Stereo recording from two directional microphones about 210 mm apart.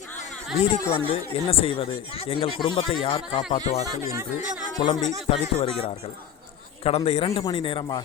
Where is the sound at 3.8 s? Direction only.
15° right (ahead or behind).